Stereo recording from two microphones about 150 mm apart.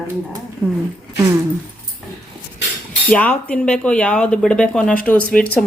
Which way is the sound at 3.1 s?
10° left (ahead or behind).